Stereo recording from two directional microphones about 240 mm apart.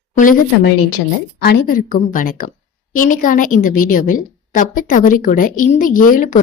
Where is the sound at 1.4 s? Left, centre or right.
Left.